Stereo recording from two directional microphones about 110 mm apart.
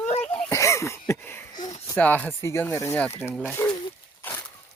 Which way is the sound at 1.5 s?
35° left (ahead or behind).